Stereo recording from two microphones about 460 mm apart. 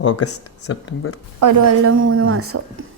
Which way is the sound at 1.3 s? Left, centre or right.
Right.